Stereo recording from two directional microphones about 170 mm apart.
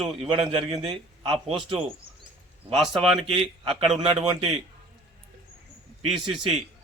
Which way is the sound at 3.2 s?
30° right (ahead or behind).